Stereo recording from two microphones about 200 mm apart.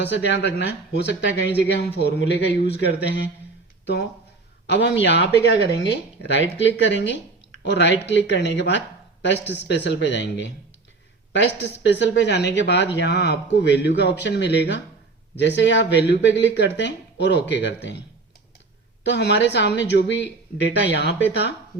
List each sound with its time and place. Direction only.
0.1 s speech: 60° left (ahead or behind)
4.6 s speech: 60° left (ahead or behind)
19.0 s speech: 60° left (ahead or behind)